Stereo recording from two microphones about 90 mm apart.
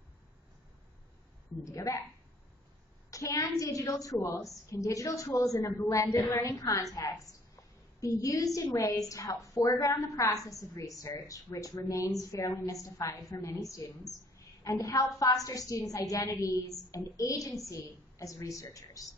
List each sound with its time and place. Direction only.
1.6 s a woman's voice: 40° left (ahead or behind)
3.1 s a woman's voice: 35° left (ahead or behind)